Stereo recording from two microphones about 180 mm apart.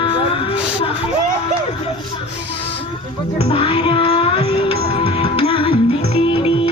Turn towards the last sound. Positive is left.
turn(degrees=35)  # may be behind; listen again after turning